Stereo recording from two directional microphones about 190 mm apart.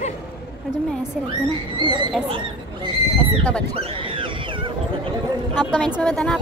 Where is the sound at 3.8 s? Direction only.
30° right (ahead or behind).